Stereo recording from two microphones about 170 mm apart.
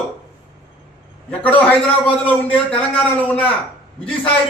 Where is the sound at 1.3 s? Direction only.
10° left (ahead or behind).